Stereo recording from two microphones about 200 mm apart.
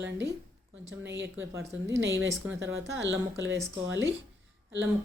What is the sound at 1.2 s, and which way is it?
Speech, 15° right (ahead or behind).